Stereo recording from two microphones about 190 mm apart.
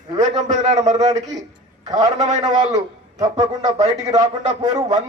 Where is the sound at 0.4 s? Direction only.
35° right (ahead or behind).